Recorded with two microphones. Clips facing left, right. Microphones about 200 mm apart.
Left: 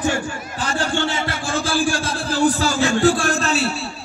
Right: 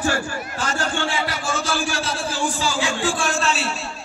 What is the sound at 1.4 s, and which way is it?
A man's voice, 30° left (ahead or behind).